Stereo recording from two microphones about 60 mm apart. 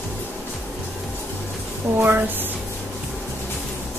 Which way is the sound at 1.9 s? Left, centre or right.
Right.